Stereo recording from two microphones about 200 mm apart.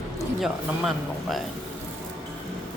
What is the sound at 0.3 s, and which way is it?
Speech, centre (ahead or behind).